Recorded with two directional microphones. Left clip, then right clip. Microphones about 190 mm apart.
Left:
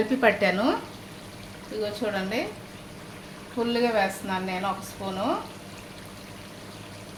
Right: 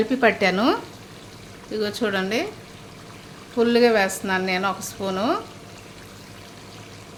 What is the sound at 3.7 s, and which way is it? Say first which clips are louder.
Speech: right 6 dB; 45° right (ahead or behind).